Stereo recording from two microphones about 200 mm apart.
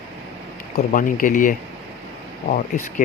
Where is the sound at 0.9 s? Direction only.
45° left (ahead or behind).